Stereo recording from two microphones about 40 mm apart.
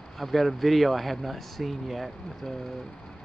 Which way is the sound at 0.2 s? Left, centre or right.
Centre.